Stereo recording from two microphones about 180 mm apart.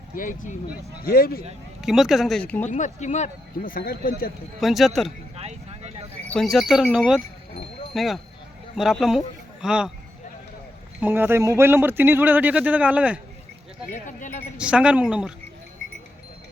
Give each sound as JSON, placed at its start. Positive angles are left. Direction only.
{"t": 0.2, "sound": "speech", "side_deg": 45}
{"t": 1.8, "sound": "speech", "side_deg": -5}
{"t": 2.6, "sound": "speech", "side_deg": 40}
{"t": 4.6, "sound": "speech", "side_deg": 0}
{"t": 5.4, "sound": "vehicle", "side_deg": -35}
{"t": 6.2, "sound": "a man's voice", "side_deg": 5}
{"t": 11.0, "sound": "speech", "side_deg": -10}
{"t": 13.9, "sound": "speech", "side_deg": 45}
{"t": 14.6, "sound": "speech", "side_deg": -5}